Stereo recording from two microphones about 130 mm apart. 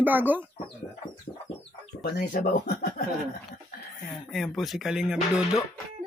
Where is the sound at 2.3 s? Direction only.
90° left.